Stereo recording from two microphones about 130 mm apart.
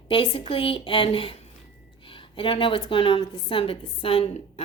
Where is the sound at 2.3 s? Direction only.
45° left (ahead or behind).